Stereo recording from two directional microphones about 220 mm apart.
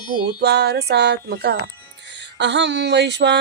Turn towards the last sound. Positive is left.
turn(degrees=-50)  # may be behind; listen again after turning